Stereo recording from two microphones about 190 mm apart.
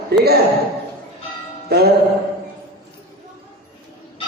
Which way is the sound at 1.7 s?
55° right (ahead or behind).